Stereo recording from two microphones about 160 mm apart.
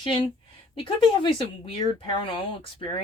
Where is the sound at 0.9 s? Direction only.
30° left (ahead or behind).